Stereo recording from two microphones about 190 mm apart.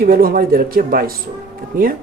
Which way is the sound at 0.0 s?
50° right (ahead or behind).